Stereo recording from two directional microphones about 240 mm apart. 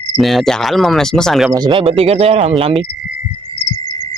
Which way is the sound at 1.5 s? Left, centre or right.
Centre.